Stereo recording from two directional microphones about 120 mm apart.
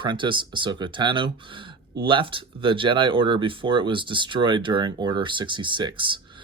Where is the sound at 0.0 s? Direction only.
40° right (ahead or behind).